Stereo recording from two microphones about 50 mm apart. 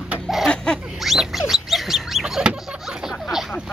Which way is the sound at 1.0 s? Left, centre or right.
Centre.